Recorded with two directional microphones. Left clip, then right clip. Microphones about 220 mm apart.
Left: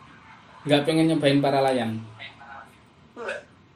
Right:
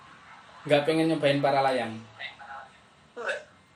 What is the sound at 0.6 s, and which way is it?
Speech, 30° left (ahead or behind).